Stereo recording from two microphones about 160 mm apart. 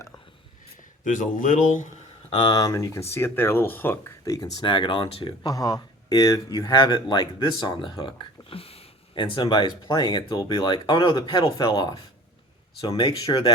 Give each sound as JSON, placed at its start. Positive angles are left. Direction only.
{"t": 1.0, "sound": "speech", "side_deg": 55}
{"t": 2.3, "sound": "speech", "side_deg": 25}
{"t": 4.6, "sound": "speech", "side_deg": 30}